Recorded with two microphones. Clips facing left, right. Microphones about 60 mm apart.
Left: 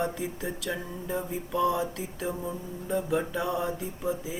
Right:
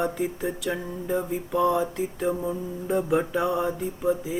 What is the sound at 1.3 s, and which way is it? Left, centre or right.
Mantra, right.